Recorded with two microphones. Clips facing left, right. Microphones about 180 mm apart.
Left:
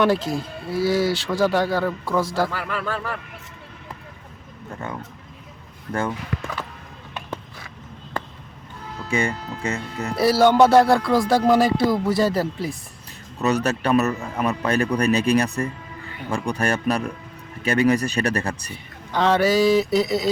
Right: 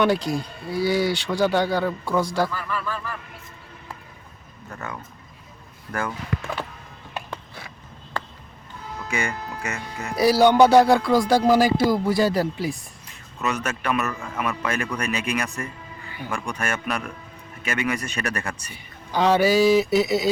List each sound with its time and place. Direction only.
0.0 s music: centre (ahead or behind)
2.5 s speech: 80° left
4.8 s speech: 25° left (ahead or behind)
9.0 s speech: 30° left (ahead or behind)
10.2 s music: centre (ahead or behind)
13.4 s speech: 35° left (ahead or behind)
19.1 s music: centre (ahead or behind)